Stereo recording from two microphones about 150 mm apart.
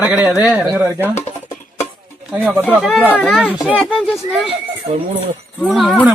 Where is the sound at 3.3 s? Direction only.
5° right (ahead or behind).